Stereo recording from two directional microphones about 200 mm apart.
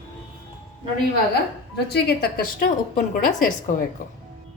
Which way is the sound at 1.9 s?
50° left (ahead or behind).